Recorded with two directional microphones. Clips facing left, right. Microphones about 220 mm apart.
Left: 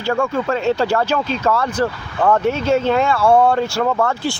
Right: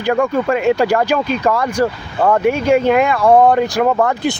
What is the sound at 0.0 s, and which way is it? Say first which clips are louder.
Speech: right 4 dB; 15° right (ahead or behind).